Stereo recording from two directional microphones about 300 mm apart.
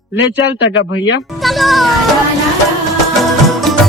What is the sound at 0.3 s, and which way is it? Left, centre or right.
Speech, left.